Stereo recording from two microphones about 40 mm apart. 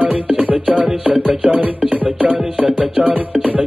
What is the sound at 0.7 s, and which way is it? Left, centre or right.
Music, right.